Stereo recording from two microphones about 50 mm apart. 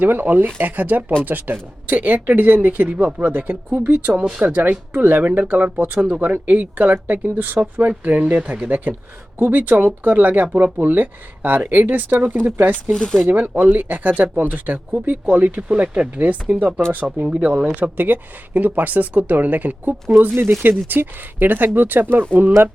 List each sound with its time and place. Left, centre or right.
0.0 s speech: right
12.9 s speech: centre
13.6 s speech: right
15.7 s speech: centre
16.1 s speech: right
20.1 s speech: right